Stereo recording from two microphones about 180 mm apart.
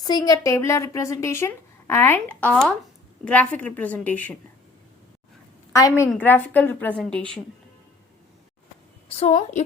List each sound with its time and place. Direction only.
0.0 s a woman's voice: 20° left (ahead or behind)
2.5 s a woman's voice: centre (ahead or behind)
5.7 s a woman's voice: 20° left (ahead or behind)
9.0 s a woman's voice: 35° left (ahead or behind)